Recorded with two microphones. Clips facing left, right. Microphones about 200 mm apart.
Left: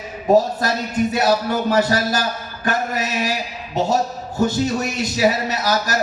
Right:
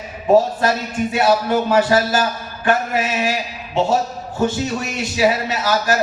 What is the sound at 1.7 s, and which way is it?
A man's voice, 40° left (ahead or behind).